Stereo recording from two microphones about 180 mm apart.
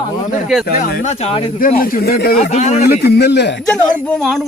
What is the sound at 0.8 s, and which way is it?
Speech, 55° left (ahead or behind).